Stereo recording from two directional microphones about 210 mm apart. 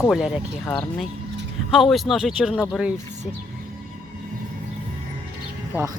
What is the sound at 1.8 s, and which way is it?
Speech, centre (ahead or behind).